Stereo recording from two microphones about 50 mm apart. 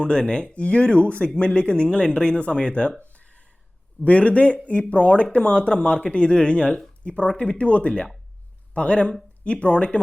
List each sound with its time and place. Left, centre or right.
0.0 s speech: centre
3.1 s a sound: left
4.0 s speech: left